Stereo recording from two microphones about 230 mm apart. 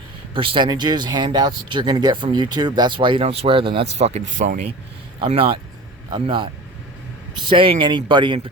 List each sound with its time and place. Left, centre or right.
0.3 s speech: right
7.5 s speech: right